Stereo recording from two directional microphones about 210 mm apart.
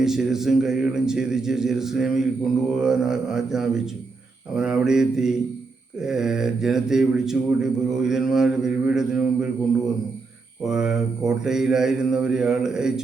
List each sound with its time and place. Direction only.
0.0 s speech: centre (ahead or behind)
10.6 s speech: 5° right (ahead or behind)